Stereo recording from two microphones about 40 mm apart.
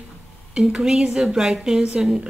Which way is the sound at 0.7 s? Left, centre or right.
Centre.